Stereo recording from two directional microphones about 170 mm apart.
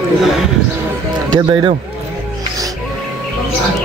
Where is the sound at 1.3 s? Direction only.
30° right (ahead or behind).